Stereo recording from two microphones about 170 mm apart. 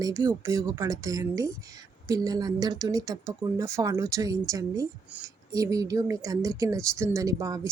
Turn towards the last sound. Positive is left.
turn(degrees=-20)  # may be behind; listen again after turning